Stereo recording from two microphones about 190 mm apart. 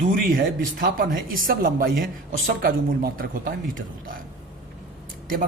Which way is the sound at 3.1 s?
50° right (ahead or behind).